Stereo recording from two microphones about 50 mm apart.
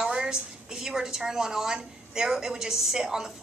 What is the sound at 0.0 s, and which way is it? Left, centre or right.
A woman's voice, centre.